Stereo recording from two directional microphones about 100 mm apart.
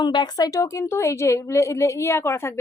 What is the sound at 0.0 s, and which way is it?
Speech, 45° left (ahead or behind).